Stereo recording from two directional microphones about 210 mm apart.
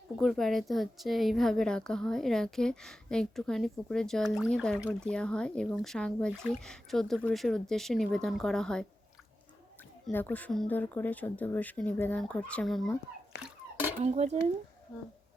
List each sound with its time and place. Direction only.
0.2 s speech: centre (ahead or behind)
10.1 s speech: 10° left (ahead or behind)
14.0 s speech: 30° right (ahead or behind)